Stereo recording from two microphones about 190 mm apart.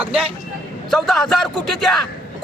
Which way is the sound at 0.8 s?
Centre (ahead or behind).